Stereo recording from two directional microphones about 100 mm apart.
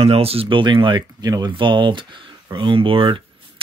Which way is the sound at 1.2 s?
40° right (ahead or behind).